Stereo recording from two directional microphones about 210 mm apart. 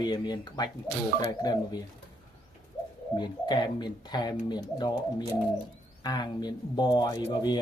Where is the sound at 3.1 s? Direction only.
20° left (ahead or behind).